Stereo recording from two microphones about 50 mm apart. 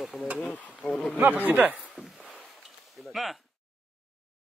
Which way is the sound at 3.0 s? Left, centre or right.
Centre.